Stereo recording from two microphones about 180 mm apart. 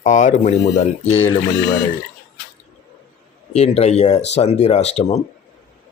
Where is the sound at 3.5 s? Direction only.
35° left (ahead or behind).